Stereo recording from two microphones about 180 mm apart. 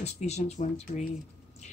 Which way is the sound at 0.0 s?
40° left (ahead or behind).